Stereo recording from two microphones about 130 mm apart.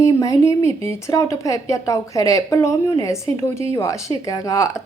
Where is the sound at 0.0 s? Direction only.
25° left (ahead or behind).